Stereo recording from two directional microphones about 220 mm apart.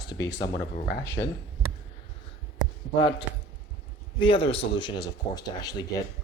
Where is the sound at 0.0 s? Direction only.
20° left (ahead or behind).